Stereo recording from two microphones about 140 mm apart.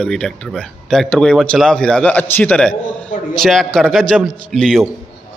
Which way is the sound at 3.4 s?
Centre (ahead or behind).